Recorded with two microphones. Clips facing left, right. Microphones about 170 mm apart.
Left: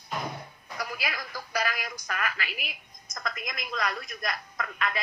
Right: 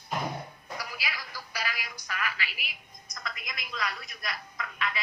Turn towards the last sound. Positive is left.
turn(degrees=45)  # may be behind; listen again after turning